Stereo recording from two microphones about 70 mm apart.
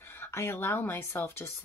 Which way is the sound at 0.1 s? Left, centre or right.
Left.